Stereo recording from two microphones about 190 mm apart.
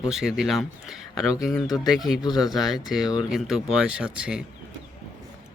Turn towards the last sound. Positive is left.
turn(degrees=-5)  # may be behind; listen again after turning